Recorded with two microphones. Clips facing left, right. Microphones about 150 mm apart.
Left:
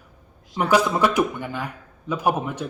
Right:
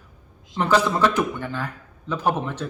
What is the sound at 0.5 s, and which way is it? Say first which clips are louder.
Speech: left 1 dB; 10° left (ahead or behind).